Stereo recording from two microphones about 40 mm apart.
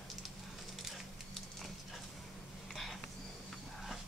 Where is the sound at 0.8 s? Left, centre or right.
Centre.